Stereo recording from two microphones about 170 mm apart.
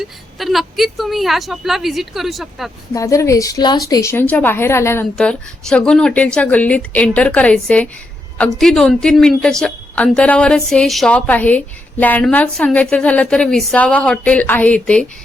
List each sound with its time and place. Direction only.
0.0 s speech: centre (ahead or behind)
2.9 s a woman's voice: 20° left (ahead or behind)
5.1 s a woman's voice: 5° left (ahead or behind)